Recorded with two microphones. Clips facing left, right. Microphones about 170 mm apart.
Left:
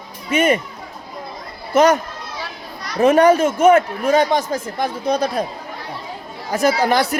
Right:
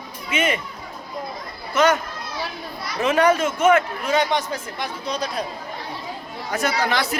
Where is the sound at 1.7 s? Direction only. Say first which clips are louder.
Left 5 dB; 40° left (ahead or behind).